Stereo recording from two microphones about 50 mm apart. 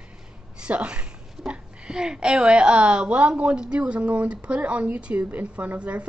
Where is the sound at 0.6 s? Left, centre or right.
Right.